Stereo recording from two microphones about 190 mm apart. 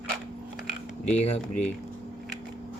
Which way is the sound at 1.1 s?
35° left (ahead or behind).